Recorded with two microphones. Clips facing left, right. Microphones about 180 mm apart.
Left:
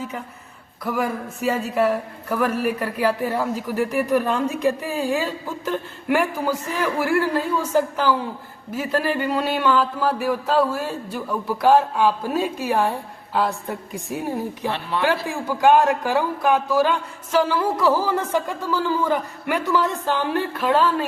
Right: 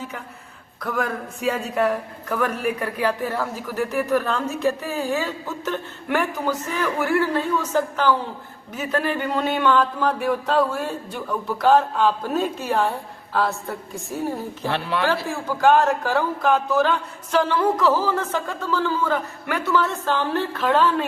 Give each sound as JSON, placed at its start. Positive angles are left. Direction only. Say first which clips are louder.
{"t": 0.8, "sound": "a man's voice", "louder": "left 2 dB", "side_deg": 10}
{"t": 14.7, "sound": "speech", "louder": "right 4 dB", "side_deg": -70}
{"t": 15.0, "sound": "a man's voice", "louder": "left 1 dB", "side_deg": 15}